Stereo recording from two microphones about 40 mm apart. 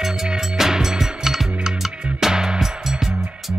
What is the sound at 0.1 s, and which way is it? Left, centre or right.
Music, centre.